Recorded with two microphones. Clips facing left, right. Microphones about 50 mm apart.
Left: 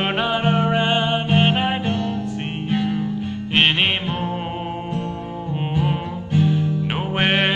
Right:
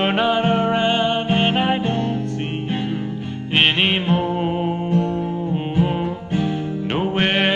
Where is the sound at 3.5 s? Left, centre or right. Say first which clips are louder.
Right 1 dB; centre.